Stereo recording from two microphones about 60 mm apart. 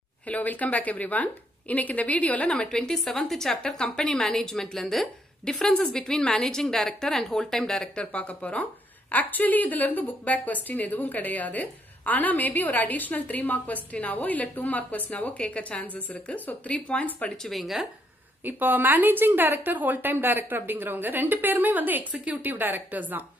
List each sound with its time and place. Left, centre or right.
0.3 s a woman's voice: left
2.5 s speech: centre
7.9 s a woman's voice: left
17.4 s speech: centre
18.4 s speech: right